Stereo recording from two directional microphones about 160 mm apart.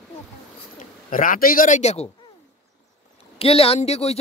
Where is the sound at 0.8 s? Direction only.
55° left (ahead or behind).